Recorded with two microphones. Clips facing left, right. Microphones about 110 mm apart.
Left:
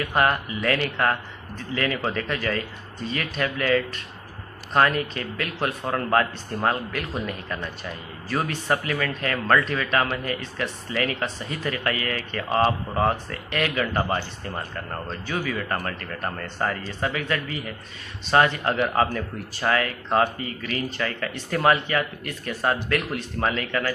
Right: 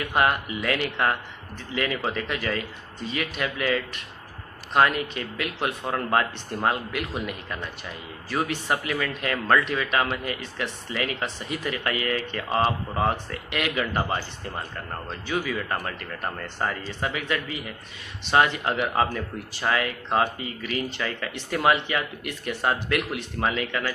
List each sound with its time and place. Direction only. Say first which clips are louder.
0.1 s speech: even; 15° right (ahead or behind)
15.0 s speech: right 2 dB; 10° right (ahead or behind)